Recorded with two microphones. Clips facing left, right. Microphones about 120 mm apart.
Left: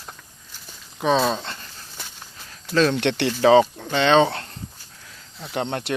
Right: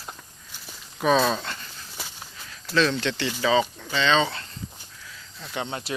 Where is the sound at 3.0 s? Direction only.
65° left (ahead or behind).